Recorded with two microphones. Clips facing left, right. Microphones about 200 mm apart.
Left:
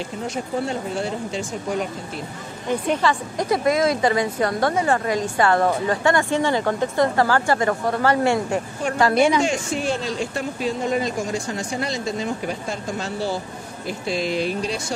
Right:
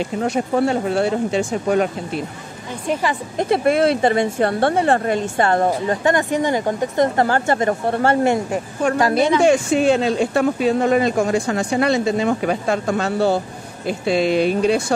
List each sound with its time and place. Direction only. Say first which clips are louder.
0.2 s speech: right 7 dB; 65° right (ahead or behind)
3.0 s a woman's voice: right 1 dB; 20° right (ahead or behind)
3.7 s speech: right 3 dB; 65° right (ahead or behind)
4.0 s a woman's voice: right 3 dB; 25° right (ahead or behind)
9.4 s speech: right 8 dB; 60° right (ahead or behind)